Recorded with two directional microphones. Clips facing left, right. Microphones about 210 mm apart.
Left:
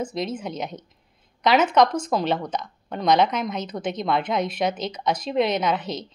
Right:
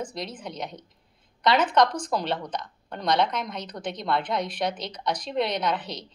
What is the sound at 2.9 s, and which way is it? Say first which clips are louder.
A woman's voice: left 5 dB; 90° left.